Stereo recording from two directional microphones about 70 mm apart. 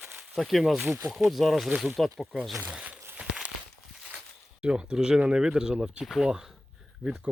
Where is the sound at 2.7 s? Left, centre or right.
Centre.